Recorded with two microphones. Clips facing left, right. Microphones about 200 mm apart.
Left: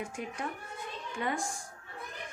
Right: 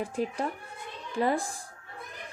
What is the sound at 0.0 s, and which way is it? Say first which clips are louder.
Speech: right 7 dB; 35° right (ahead or behind).